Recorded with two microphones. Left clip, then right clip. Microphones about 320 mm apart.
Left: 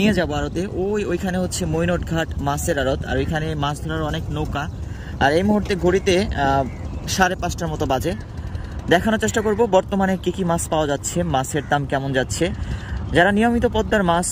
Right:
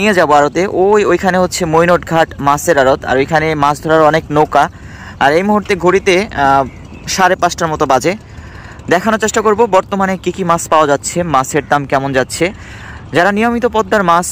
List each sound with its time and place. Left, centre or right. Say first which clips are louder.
0.0 s speech: right 13 dB; centre
3.8 s speech: right 17 dB; right
5.3 s speech: right 8 dB; centre